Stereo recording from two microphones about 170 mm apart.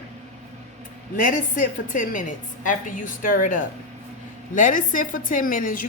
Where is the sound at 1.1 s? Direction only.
50° left (ahead or behind).